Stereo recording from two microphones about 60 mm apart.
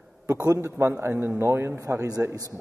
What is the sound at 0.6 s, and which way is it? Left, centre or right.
A man's voice, right.